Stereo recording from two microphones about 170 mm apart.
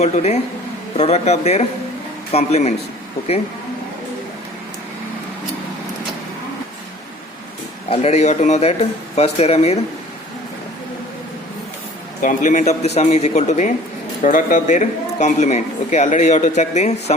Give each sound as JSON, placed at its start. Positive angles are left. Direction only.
{"t": 0.0, "sound": "speech", "side_deg": 40}
{"t": 7.9, "sound": "speech", "side_deg": 35}
{"t": 12.2, "sound": "speech", "side_deg": 45}